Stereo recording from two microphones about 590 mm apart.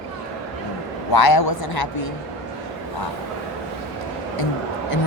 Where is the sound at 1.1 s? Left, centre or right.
Left.